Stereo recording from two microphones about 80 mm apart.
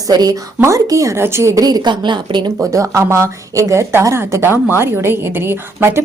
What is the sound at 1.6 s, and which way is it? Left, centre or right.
Speech, right.